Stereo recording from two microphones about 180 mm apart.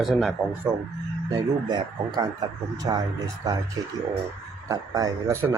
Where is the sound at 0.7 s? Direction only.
10° right (ahead or behind).